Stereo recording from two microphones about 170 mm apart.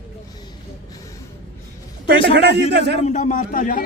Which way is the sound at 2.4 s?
80° right.